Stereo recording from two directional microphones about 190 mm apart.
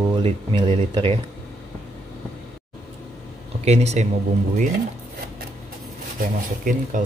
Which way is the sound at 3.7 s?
35° right (ahead or behind).